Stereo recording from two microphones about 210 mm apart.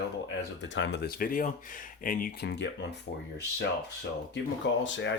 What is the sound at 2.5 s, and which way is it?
Speech, 55° left (ahead or behind).